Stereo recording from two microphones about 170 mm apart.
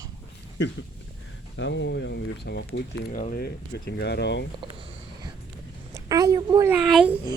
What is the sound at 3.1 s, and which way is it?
Speech, 50° left (ahead or behind).